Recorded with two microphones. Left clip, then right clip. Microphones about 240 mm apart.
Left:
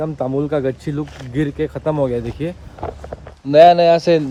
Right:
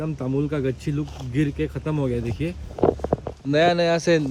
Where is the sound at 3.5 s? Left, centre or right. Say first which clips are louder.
Left 10 dB; left.